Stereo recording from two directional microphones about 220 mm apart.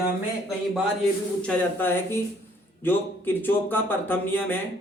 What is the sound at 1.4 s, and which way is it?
A man's voice, 5° left (ahead or behind).